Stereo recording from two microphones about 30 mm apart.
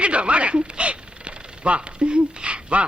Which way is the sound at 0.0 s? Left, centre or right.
Right.